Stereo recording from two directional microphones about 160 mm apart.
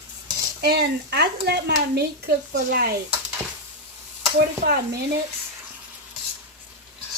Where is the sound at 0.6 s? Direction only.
90° right; by 2.9 s 70° right (ahead or behind).